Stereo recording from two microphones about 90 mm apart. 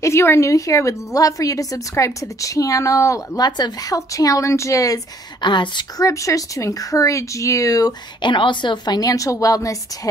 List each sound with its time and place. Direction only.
0.0 s a woman's voice: 30° left (ahead or behind)
3.4 s a woman's voice: 50° left (ahead or behind)
5.4 s a woman's voice: 60° left (ahead or behind)
5.9 s a woman's voice: 35° left (ahead or behind)
8.2 s a woman's voice: 65° left (ahead or behind); by 9.8 s 40° left (ahead or behind)